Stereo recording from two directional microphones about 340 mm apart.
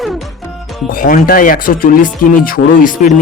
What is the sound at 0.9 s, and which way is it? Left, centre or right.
Speech, left.